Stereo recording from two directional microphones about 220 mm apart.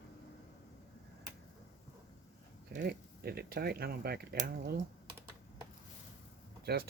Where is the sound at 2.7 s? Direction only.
45° right (ahead or behind).